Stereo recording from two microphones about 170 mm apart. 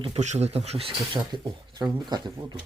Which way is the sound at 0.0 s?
40° right (ahead or behind).